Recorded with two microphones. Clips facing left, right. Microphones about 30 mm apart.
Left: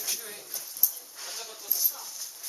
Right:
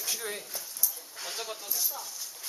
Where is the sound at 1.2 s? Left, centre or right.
Right.